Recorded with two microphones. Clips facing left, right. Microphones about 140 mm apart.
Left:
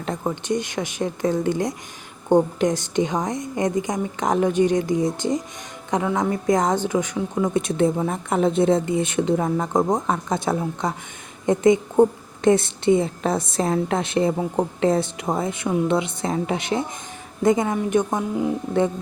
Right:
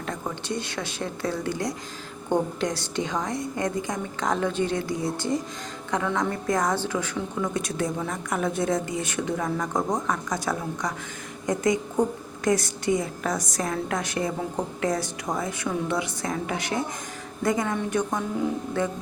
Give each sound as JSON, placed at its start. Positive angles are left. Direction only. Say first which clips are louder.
{"t": 0.0, "sound": "a woman's voice", "louder": "left 6 dB", "side_deg": 20}